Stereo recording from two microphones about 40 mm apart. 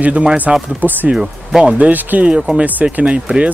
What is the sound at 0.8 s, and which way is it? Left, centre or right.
Speech, right.